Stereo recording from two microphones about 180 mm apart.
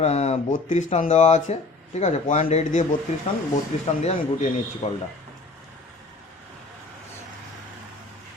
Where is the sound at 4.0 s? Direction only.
40° left (ahead or behind).